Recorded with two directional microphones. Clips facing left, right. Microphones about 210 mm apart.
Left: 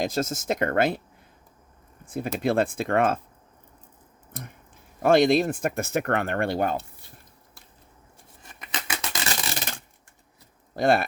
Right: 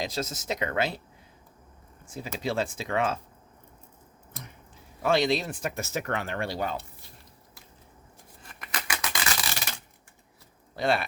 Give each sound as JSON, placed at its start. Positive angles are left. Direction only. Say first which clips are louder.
{"t": 0.0, "sound": "speech", "louder": "left 6 dB", "side_deg": 50}
{"t": 2.0, "sound": "speech", "louder": "left 7 dB", "side_deg": 55}
{"t": 4.3, "sound": "a sound", "louder": "left 5 dB", "side_deg": 55}
{"t": 5.0, "sound": "speech", "louder": "left 6 dB", "side_deg": 50}
{"t": 8.6, "sound": "a sound", "louder": "left 1 dB", "side_deg": 25}
{"t": 10.8, "sound": "speech", "louder": "left 5 dB", "side_deg": 45}